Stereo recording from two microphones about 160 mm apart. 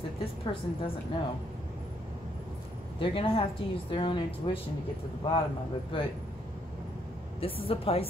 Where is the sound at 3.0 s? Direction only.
35° left (ahead or behind).